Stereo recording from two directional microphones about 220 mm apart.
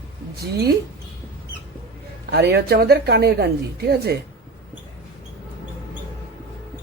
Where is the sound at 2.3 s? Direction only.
45° right (ahead or behind).